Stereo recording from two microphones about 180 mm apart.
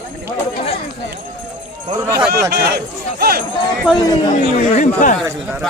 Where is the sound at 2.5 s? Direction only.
60° right (ahead or behind).